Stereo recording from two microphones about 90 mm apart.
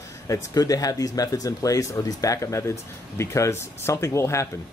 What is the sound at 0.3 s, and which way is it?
Speech, 40° left (ahead or behind).